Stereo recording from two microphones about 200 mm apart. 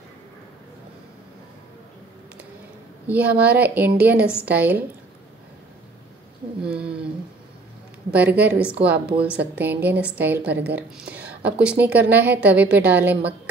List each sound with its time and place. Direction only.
3.1 s a woman's voice: 5° right (ahead or behind)
6.6 s a sound: 5° right (ahead or behind)
8.1 s a woman's voice: 10° right (ahead or behind)
11.9 s a woman's voice: 55° right (ahead or behind)
12.2 s a woman's voice: 10° right (ahead or behind)